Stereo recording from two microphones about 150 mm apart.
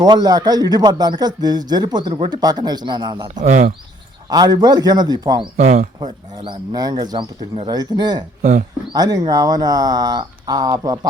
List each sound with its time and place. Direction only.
0.0 s speech: 25° right (ahead or behind)
8.4 s speech: 55° right (ahead or behind)
8.9 s speech: 25° right (ahead or behind)